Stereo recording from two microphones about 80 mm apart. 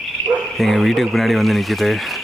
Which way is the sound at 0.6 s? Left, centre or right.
Centre.